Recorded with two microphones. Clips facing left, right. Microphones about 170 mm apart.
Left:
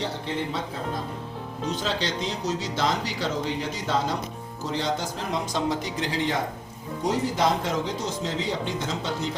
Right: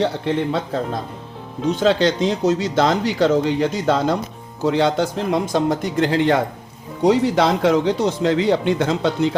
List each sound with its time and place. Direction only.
0.0 s speech: 65° right (ahead or behind)
7.0 s speech: 75° right (ahead or behind)